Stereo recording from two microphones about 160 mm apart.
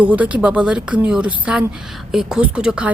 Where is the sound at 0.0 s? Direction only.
10° right (ahead or behind).